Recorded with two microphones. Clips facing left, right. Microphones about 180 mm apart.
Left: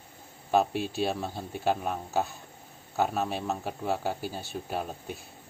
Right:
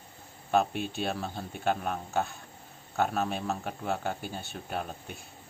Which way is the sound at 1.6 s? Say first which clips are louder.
Left 1 dB; 35° left (ahead or behind).